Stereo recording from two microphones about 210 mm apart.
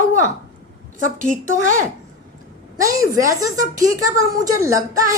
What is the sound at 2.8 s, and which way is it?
A woman's voice, 15° right (ahead or behind).